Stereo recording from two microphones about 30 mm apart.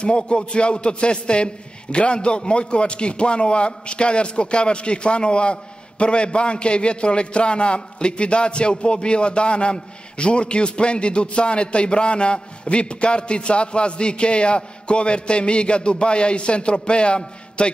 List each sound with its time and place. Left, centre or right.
0.0 s a man's voice: left